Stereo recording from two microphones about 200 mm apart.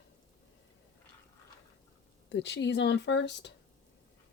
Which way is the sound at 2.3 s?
60° left (ahead or behind).